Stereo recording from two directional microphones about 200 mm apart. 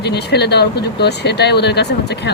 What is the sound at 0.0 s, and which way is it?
Speech, 55° left (ahead or behind).